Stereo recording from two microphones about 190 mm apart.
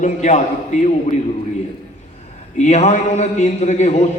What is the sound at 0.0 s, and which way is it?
Speech, 40° left (ahead or behind).